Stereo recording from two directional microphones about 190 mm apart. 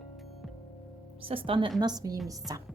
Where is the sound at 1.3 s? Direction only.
30° right (ahead or behind).